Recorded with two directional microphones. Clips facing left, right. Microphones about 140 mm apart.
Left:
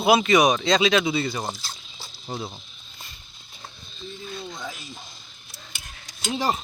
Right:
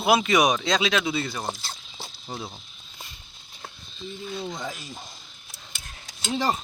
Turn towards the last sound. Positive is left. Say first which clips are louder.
# even
turn(degrees=10)  # may be behind; listen again after turning